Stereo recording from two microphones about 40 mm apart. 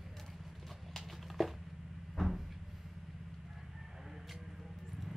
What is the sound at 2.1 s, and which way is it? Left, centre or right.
Cupboard open or close, centre.